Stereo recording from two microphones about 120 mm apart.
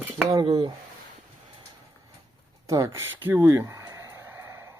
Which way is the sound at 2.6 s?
25° right (ahead or behind).